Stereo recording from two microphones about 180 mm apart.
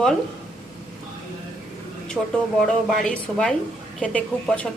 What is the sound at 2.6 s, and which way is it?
A woman's voice, 5° left (ahead or behind).